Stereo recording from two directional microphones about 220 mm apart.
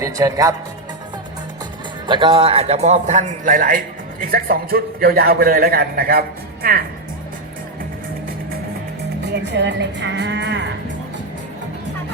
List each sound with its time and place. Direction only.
0.0 s speech: 15° right (ahead or behind)
2.0 s a man's voice: 20° right (ahead or behind); by 6.8 s 40° right (ahead or behind)
9.2 s a man's voice: 50° right (ahead or behind)